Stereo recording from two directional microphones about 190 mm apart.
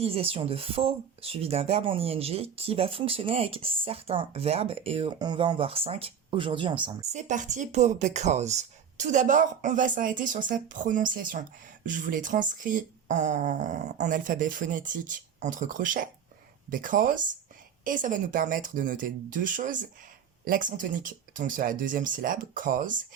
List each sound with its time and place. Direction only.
0.0 s speech: 30° right (ahead or behind)
7.1 s speech: 40° right (ahead or behind)